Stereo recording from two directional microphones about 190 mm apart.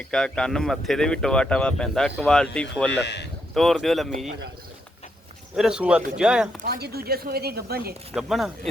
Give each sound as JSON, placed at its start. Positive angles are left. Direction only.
{"t": 0.1, "sound": "speech", "side_deg": 5}
{"t": 3.0, "sound": "speech", "side_deg": 65}
{"t": 3.5, "sound": "speech", "side_deg": 0}
{"t": 5.5, "sound": "speech", "side_deg": -5}
{"t": 6.6, "sound": "speech", "side_deg": -55}
{"t": 8.1, "sound": "speech", "side_deg": 0}